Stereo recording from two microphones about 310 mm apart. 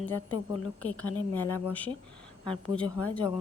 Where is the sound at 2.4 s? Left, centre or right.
Centre.